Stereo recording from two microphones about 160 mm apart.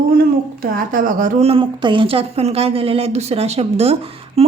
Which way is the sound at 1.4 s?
35° right (ahead or behind).